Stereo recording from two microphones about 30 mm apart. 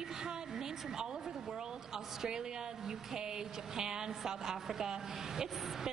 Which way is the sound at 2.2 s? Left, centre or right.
Right.